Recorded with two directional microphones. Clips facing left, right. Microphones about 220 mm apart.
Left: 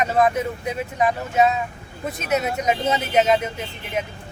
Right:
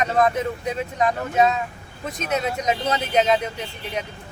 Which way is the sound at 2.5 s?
5° left (ahead or behind).